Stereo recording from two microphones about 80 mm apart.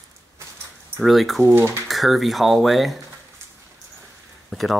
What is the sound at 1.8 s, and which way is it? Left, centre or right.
Speech, centre.